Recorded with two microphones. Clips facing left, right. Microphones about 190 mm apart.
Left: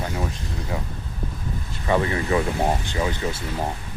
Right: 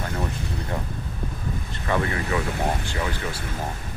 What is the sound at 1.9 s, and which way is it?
Speech, 15° left (ahead or behind).